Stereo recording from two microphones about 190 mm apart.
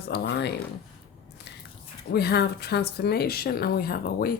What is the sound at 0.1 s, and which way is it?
Speech, 65° left (ahead or behind).